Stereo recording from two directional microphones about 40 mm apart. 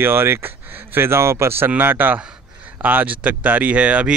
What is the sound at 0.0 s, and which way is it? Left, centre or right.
Speech, right.